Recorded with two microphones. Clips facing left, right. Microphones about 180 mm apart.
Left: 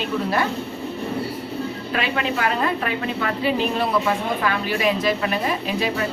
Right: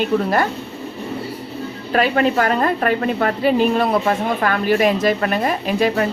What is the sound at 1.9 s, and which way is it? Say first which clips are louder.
A woman's voice: right 8 dB; 45° right (ahead or behind).